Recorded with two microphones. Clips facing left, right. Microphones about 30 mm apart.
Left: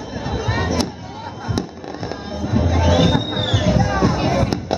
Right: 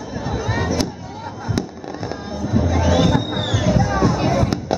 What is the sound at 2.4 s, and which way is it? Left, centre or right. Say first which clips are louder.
Music: even; centre.